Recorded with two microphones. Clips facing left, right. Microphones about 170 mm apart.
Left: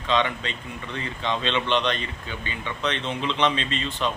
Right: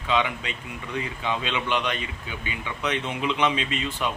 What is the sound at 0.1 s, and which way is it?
Speech, 10° right (ahead or behind).